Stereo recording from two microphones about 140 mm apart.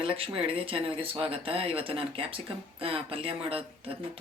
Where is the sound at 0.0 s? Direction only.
40° right (ahead or behind).